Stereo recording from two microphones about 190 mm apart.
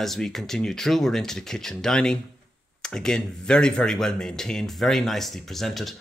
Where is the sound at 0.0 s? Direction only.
Centre (ahead or behind).